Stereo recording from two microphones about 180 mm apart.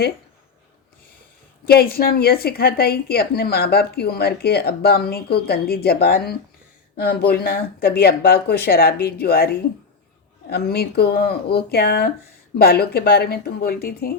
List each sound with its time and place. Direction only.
1.6 s a woman's voice: 60° left (ahead or behind)